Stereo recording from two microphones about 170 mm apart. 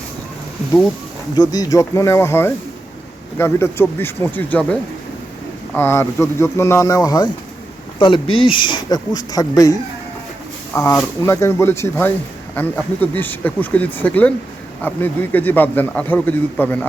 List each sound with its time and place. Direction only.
1.4 s a man's voice: 20° left (ahead or behind)
10.8 s a man's voice: 15° left (ahead or behind)